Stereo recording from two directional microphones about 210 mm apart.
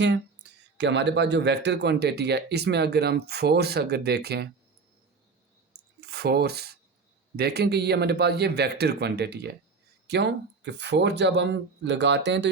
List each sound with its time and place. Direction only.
0.8 s speech: 55° right (ahead or behind)
6.0 s speech: 50° right (ahead or behind)